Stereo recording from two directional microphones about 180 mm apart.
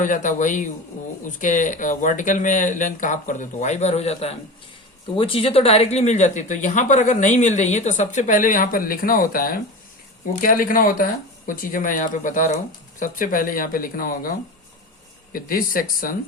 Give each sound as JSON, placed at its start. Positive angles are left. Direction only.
{"t": 0.0, "sound": "speech", "side_deg": 45}